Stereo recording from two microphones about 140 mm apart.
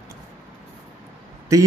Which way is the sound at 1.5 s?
20° right (ahead or behind).